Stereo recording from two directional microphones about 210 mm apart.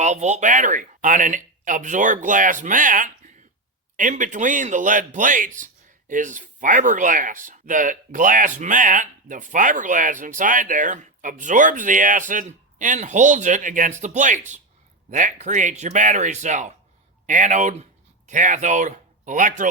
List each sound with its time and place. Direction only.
0.0 s speech: 35° right (ahead or behind)